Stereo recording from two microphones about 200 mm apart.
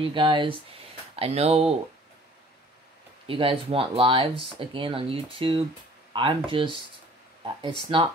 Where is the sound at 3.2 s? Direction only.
25° right (ahead or behind).